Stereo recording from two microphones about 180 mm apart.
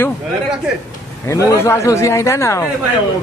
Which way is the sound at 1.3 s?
15° left (ahead or behind).